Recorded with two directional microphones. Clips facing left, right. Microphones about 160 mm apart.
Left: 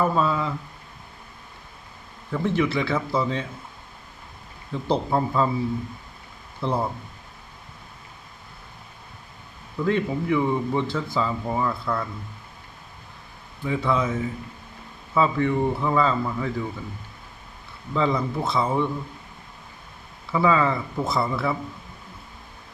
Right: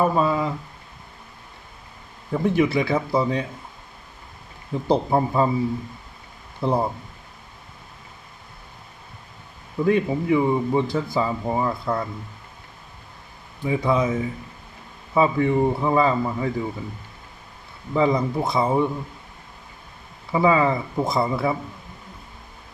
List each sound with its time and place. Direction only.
0.0 s a man's voice: 15° right (ahead or behind)
2.3 s a man's voice: 20° right (ahead or behind)
4.7 s speech: 20° right (ahead or behind)
6.6 s speech: 20° right (ahead or behind)
9.7 s speech: 15° right (ahead or behind)
13.7 s a man's voice: 15° right (ahead or behind)
17.9 s a man's voice: 15° right (ahead or behind)
20.3 s a man's voice: 15° right (ahead or behind)